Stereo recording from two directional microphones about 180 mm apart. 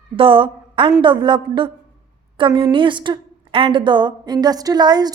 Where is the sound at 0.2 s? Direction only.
30° right (ahead or behind).